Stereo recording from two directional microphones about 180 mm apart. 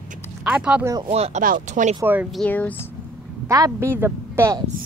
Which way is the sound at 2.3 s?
5° left (ahead or behind).